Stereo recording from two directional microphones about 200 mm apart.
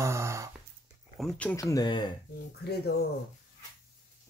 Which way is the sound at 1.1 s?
5° left (ahead or behind).